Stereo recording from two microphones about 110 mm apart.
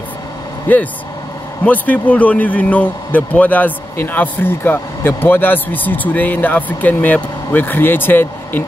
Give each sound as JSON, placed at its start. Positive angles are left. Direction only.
{"t": 0.7, "sound": "speech", "side_deg": 15}